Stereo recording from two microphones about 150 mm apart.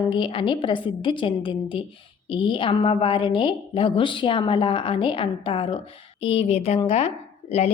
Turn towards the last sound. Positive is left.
turn(degrees=45)  # may be behind; listen again after turning